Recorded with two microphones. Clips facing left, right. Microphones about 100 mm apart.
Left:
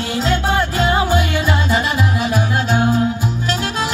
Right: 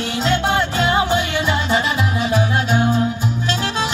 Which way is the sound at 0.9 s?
25° right (ahead or behind).